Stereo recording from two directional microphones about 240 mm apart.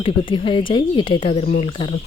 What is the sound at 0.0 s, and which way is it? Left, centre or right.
Speech, left.